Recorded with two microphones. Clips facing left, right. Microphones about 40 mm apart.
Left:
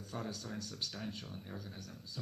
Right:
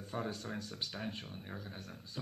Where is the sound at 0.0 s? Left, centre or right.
Right.